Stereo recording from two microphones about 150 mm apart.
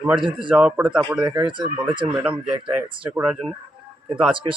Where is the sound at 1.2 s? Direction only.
30° right (ahead or behind).